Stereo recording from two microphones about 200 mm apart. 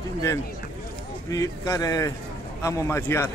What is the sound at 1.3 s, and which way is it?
A man's voice, 15° left (ahead or behind).